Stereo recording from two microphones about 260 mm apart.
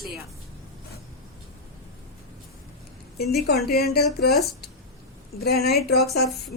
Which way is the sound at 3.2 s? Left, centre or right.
Left.